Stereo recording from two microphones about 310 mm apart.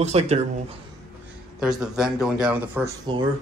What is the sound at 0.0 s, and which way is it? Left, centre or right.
Speech, centre.